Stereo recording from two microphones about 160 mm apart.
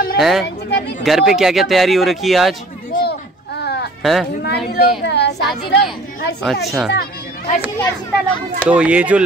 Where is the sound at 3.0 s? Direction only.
90° left.